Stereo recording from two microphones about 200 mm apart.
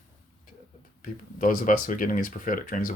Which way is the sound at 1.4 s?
45° left (ahead or behind).